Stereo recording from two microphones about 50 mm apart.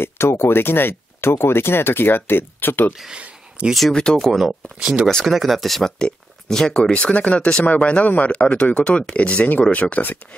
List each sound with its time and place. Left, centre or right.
0.0 s speech: left
3.1 s a sound: right
3.9 s speech: centre
4.3 s speech: centre
5.9 s speech: centre; by 10.1 s left